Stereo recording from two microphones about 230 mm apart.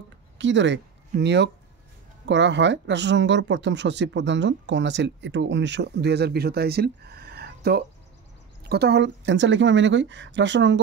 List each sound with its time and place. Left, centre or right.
0.4 s speech: right